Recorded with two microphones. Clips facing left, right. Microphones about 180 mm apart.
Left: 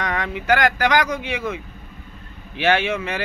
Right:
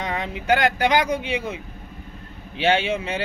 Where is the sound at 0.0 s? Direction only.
25° right (ahead or behind).